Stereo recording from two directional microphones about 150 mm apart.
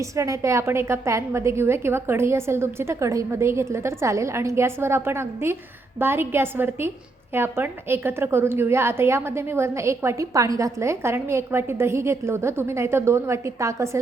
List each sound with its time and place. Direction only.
0.0 s a woman's voice: 20° right (ahead or behind)